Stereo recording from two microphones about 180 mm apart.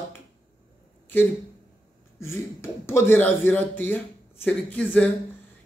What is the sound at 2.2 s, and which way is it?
Speech, 15° left (ahead or behind).